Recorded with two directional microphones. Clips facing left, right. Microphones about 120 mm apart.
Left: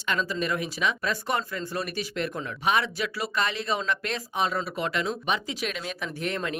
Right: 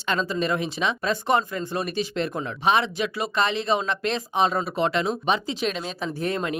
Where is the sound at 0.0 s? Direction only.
30° right (ahead or behind).